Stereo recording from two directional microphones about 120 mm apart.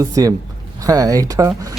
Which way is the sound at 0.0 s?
30° right (ahead or behind).